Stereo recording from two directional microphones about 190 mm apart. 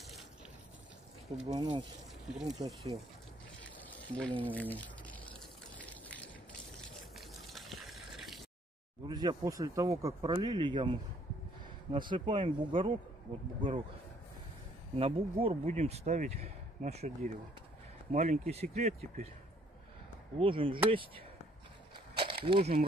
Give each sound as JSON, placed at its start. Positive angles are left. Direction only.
{"t": 1.5, "sound": "speech", "side_deg": -25}
{"t": 2.2, "sound": "speech", "side_deg": 0}
{"t": 2.6, "sound": "speech", "side_deg": -30}
{"t": 4.2, "sound": "speech", "side_deg": 10}
{"t": 5.8, "sound": "a sound", "side_deg": 10}
{"t": 7.2, "sound": "water", "side_deg": 0}
{"t": 9.0, "sound": "speech", "side_deg": -20}
{"t": 15.0, "sound": "speech", "side_deg": -30}
{"t": 18.1, "sound": "speech", "side_deg": -40}
{"t": 20.3, "sound": "speech", "side_deg": -25}
{"t": 22.2, "sound": "a sound", "side_deg": -25}